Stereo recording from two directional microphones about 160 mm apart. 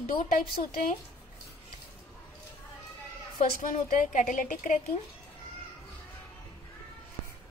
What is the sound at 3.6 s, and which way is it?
A woman's voice, 55° left (ahead or behind).